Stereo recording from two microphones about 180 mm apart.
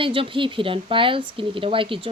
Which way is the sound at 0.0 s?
30° right (ahead or behind).